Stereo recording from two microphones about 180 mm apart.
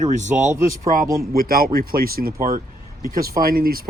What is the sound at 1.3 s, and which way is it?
Speech, 55° right (ahead or behind).